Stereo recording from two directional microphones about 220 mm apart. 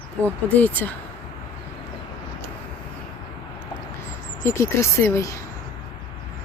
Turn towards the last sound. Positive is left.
turn(degrees=10)  # may be behind; listen again after turning